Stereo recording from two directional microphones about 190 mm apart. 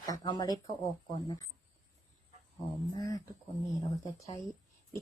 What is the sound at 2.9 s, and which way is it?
Speech, 20° left (ahead or behind).